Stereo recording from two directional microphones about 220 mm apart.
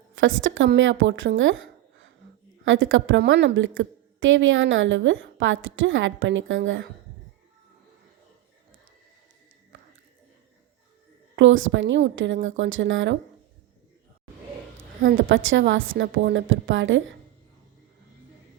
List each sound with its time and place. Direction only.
0.2 s a woman's voice: 60° right (ahead or behind)
9.7 s a sound: 60° right (ahead or behind)
11.3 s a woman's voice: 60° right (ahead or behind)
15.0 s a woman's voice: 45° right (ahead or behind)
15.3 s a woman's voice: 60° right (ahead or behind)